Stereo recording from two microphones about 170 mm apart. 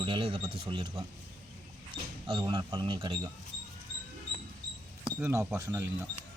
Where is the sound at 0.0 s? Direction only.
30° right (ahead or behind).